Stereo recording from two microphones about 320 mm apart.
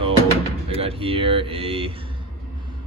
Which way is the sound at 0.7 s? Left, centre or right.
Centre.